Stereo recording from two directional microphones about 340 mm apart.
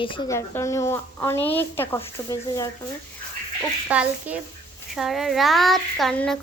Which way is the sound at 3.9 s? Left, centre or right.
Centre.